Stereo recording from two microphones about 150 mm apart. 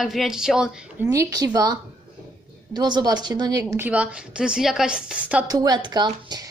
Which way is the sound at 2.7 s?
30° right (ahead or behind).